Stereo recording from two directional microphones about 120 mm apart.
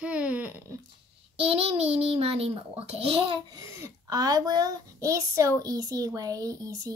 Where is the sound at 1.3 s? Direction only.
55° right (ahead or behind).